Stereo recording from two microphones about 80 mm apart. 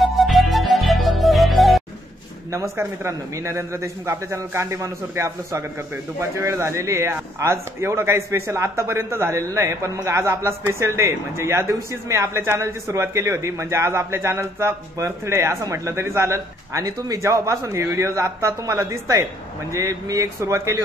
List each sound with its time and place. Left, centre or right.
0.0 s music: centre
3.0 s a man's voice: right